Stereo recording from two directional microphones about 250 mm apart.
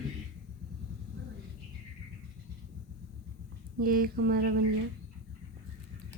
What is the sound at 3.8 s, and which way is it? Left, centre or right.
Speech, right.